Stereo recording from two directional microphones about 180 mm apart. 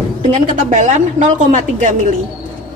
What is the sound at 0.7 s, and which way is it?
A woman's voice, 40° right (ahead or behind).